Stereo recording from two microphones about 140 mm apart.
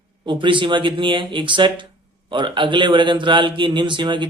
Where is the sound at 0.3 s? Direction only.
35° right (ahead or behind).